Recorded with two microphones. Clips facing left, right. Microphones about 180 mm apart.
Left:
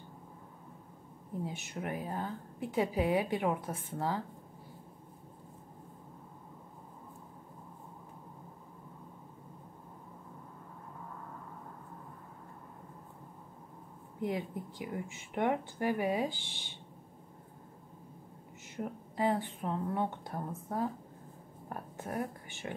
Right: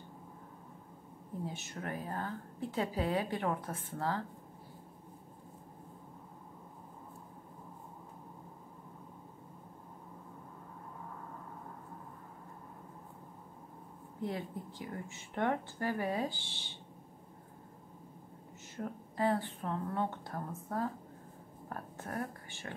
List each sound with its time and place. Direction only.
1.4 s a woman's voice: 15° left (ahead or behind)
14.2 s a woman's voice: 15° left (ahead or behind)
18.8 s a woman's voice: 15° left (ahead or behind)